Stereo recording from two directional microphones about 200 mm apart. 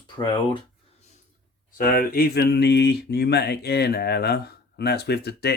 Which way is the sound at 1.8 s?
45° left (ahead or behind).